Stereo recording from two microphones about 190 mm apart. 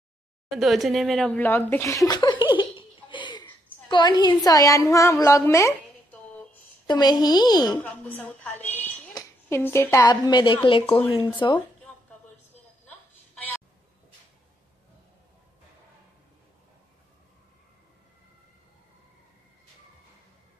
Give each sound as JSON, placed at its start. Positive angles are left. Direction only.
{"t": 0.5, "sound": "laughter", "side_deg": 0}
{"t": 3.9, "sound": "a woman's voice", "side_deg": 20}
{"t": 6.9, "sound": "a woman's voice", "side_deg": 20}
{"t": 7.7, "sound": "a woman's voice", "side_deg": 10}